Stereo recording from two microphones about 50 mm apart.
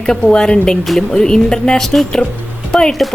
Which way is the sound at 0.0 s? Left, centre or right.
Centre.